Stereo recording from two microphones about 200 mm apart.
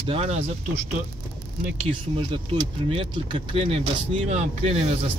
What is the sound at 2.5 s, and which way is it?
Speech, 30° right (ahead or behind).